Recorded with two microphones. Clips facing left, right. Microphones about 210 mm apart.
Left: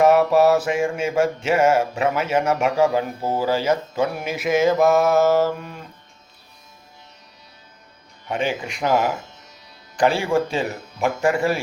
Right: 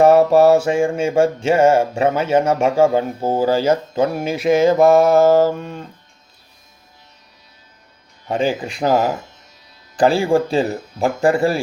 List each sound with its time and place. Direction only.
0.0 s mantra: 30° right (ahead or behind)
8.3 s speech: 35° right (ahead or behind)